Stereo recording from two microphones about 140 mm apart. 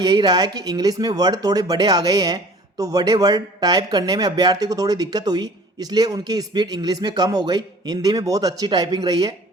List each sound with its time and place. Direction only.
0.0 s speech: 30° right (ahead or behind)